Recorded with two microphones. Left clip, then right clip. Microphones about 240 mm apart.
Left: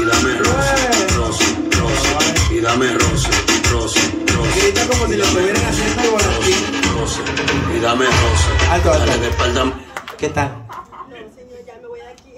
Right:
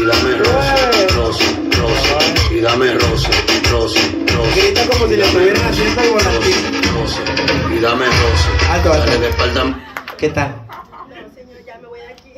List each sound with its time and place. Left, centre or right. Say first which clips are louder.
0.0 s music: right 2 dB; centre
10.2 s speech: right 2 dB; centre